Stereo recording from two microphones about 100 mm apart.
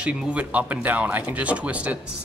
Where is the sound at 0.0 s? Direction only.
10° right (ahead or behind).